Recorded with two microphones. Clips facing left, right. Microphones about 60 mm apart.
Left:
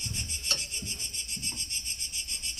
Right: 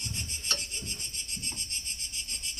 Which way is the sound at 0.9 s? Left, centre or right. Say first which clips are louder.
Even; centre.